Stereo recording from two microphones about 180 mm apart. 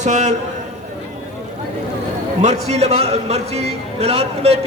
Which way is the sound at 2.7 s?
35° right (ahead or behind).